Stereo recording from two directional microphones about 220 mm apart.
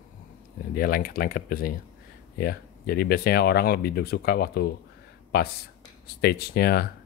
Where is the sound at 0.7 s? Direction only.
40° left (ahead or behind).